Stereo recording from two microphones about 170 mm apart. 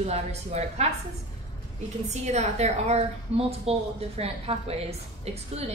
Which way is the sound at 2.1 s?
40° right (ahead or behind).